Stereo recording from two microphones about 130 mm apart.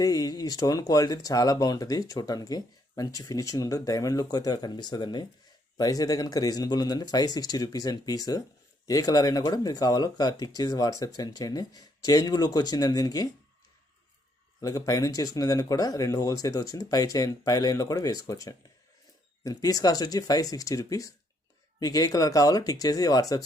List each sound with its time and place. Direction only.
0.0 s speech: 30° left (ahead or behind)
14.6 s speech: 25° left (ahead or behind)